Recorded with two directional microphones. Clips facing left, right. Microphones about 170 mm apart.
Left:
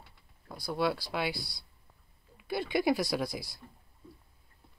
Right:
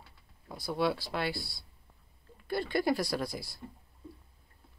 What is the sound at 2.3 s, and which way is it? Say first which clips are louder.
Speech: even; 10° left (ahead or behind).